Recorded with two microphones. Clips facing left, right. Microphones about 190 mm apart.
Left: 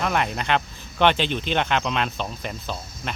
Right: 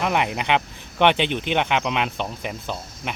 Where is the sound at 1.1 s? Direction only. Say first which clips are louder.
Right 2 dB; 65° right (ahead or behind).